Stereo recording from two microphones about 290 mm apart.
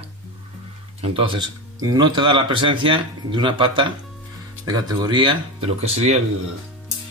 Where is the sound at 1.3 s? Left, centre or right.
Centre.